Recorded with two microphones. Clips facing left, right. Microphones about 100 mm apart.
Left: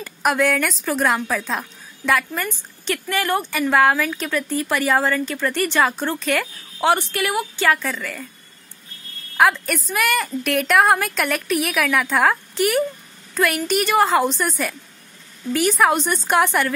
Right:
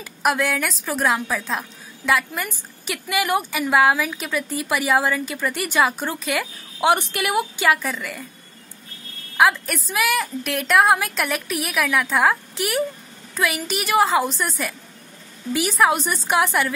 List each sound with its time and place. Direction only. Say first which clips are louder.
0.0 s a woman's voice: left 2 dB; centre (ahead or behind)
6.9 s a woman's voice: even; 20° right (ahead or behind)
9.4 s a woman's voice: left 1 dB; centre (ahead or behind)